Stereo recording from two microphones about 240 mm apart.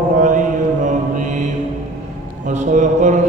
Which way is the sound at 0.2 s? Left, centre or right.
Right.